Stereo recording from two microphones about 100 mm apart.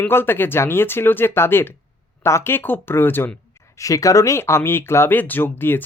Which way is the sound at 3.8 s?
35° left (ahead or behind).